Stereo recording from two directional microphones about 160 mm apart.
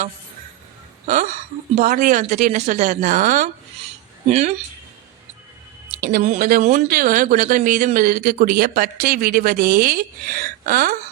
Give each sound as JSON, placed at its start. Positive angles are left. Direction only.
{"t": 1.0, "sound": "speech", "side_deg": -50}
{"t": 6.0, "sound": "speech", "side_deg": -60}